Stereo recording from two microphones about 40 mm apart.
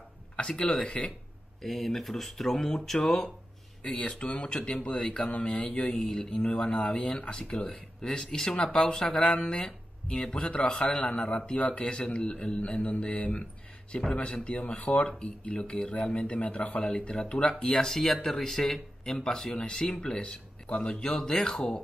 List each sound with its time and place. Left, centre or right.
0.4 s speech: left
1.6 s speech: centre
4.0 s speech: left
4.4 s speech: left
5.3 s speech: left
5.9 s speech: centre
8.3 s speech: centre; by 12.5 s left
12.7 s speech: left
14.7 s speech: left